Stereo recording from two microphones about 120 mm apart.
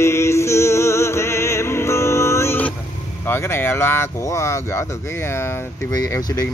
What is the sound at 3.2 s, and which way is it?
Speech, 20° left (ahead or behind).